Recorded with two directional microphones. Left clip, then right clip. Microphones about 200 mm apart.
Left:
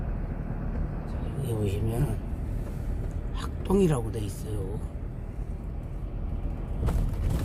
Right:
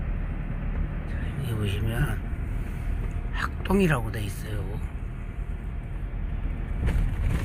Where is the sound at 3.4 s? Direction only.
10° left (ahead or behind).